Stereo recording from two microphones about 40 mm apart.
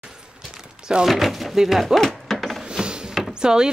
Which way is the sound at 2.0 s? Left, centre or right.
Centre.